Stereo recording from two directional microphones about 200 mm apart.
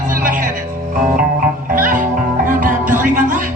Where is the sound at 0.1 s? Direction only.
40° right (ahead or behind).